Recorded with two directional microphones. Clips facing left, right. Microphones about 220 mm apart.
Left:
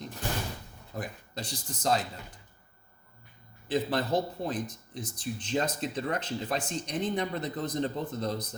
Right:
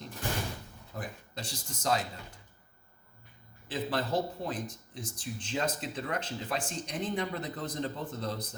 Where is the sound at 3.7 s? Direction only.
40° left (ahead or behind).